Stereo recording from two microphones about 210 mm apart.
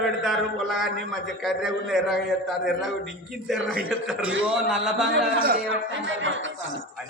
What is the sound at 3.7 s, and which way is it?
A man's voice, 5° right (ahead or behind).